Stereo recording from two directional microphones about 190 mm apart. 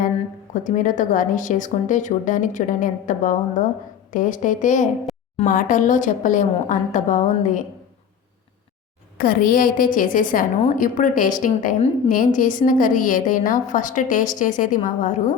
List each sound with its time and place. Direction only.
0.5 s a woman's voice: 40° left (ahead or behind)
5.1 s a sound: centre (ahead or behind)
5.5 s a woman's voice: 45° left (ahead or behind)
9.1 s a woman's voice: 50° left (ahead or behind)